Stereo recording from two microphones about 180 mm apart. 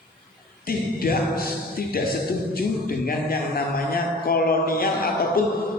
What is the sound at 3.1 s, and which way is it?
Speech, 55° left (ahead or behind).